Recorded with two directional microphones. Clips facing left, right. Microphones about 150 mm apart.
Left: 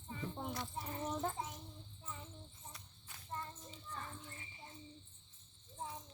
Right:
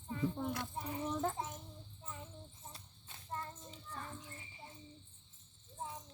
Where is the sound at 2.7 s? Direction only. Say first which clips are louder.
Right 1 dB; 30° right (ahead or behind).